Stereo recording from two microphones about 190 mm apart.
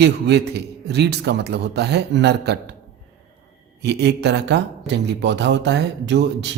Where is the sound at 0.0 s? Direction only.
65° right (ahead or behind).